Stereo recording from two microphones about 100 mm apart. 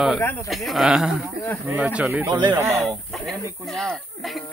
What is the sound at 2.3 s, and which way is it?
Speech, 45° right (ahead or behind).